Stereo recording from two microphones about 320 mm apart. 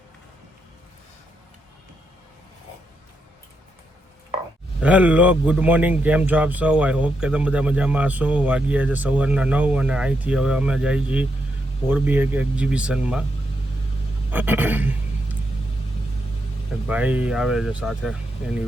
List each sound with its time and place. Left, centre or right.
4.8 s speech: centre
14.3 s speech: centre
16.9 s speech: centre